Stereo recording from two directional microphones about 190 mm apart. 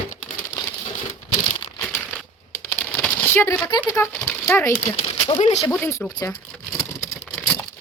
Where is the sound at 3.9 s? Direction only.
10° left (ahead or behind).